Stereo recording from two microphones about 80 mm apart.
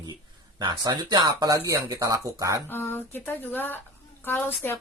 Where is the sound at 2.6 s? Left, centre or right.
Left.